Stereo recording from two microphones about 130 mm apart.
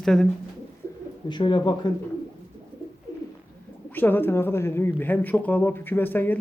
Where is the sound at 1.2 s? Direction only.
35° left (ahead or behind).